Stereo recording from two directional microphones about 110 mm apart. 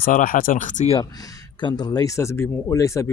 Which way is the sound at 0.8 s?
80° left.